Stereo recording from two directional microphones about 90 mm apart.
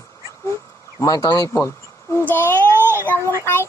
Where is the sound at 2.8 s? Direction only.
25° left (ahead or behind).